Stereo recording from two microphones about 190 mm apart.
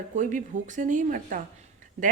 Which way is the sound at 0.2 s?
40° right (ahead or behind).